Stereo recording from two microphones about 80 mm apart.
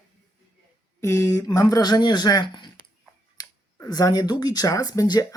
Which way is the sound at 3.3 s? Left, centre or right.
Left.